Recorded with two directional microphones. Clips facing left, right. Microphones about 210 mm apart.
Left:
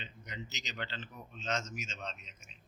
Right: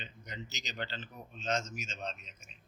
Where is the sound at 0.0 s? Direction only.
40° right (ahead or behind).